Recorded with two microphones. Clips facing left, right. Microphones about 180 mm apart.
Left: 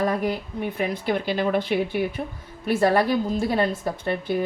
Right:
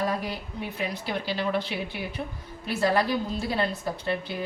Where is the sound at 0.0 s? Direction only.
55° left (ahead or behind).